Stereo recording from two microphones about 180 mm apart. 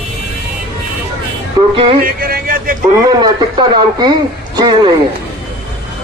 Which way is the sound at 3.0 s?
25° right (ahead or behind).